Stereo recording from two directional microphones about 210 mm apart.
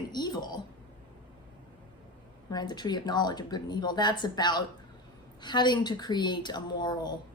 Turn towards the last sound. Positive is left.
turn(degrees=20)  # may be behind; listen again after turning